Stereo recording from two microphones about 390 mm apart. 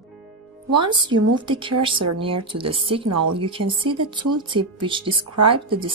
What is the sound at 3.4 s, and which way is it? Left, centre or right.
Speech, centre.